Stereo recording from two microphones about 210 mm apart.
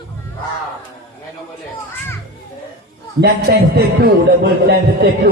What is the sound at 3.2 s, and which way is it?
A man's voice, 45° right (ahead or behind).